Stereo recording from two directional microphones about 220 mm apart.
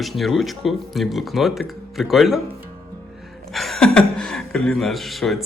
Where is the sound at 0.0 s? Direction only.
Centre (ahead or behind).